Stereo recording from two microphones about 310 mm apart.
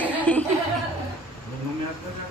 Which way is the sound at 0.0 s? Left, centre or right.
Centre.